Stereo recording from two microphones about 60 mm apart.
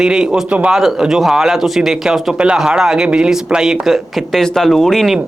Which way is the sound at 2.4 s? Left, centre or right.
Centre.